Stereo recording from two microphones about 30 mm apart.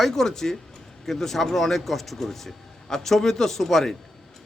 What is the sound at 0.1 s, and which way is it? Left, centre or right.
A man's voice, centre.